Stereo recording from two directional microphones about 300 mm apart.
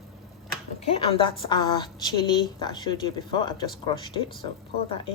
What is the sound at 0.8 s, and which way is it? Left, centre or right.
A woman's voice, centre.